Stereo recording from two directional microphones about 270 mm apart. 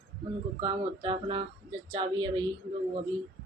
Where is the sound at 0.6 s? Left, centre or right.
Centre.